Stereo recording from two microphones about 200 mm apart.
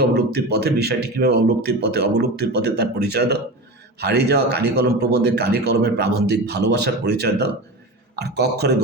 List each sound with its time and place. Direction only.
0.0 s a man's voice: 55° right (ahead or behind)